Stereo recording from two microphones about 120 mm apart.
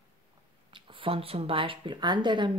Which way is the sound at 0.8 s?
50° right (ahead or behind).